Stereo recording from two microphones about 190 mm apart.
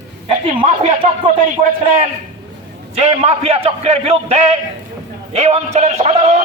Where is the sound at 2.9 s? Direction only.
35° right (ahead or behind).